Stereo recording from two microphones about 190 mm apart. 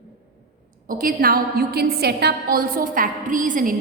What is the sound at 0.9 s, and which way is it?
A woman's voice, 45° right (ahead or behind).